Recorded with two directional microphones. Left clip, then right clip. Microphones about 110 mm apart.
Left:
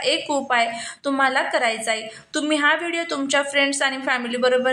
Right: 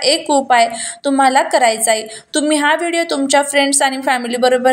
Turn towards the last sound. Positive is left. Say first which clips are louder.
# right 6 dB
turn(degrees=-30)  # may be behind; listen again after turning